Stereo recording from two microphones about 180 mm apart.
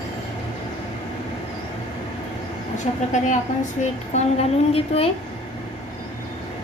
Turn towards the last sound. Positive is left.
turn(degrees=35)  # may be behind; listen again after turning